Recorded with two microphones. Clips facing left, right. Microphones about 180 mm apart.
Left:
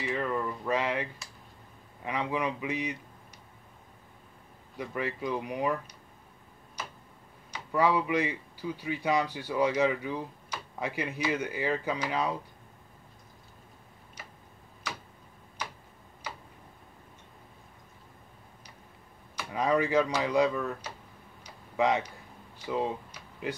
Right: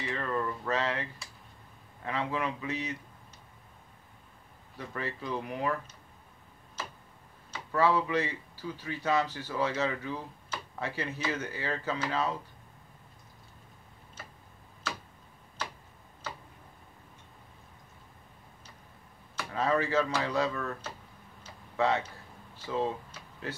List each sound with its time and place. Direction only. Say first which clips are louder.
0.1 s speech: left 1 dB; 15° left (ahead or behind)
2.0 s speech: left 2 dB; 15° left (ahead or behind)
4.7 s speech: left 4 dB; 15° left (ahead or behind)
7.5 s speech: left 1 dB; 15° left (ahead or behind)
19.5 s speech: left 2 dB; 15° left (ahead or behind)